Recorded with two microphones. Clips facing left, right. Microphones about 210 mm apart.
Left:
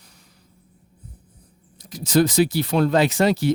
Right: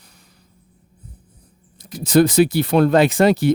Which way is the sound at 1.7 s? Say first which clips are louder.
Right 4 dB; 55° right (ahead or behind).